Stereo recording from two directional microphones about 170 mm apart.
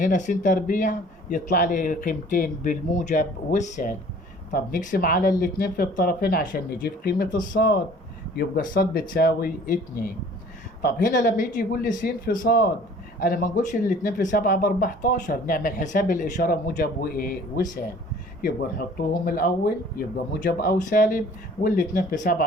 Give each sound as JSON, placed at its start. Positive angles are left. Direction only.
{"t": 0.0, "sound": "speech", "side_deg": 45}
{"t": 18.4, "sound": "speech", "side_deg": 60}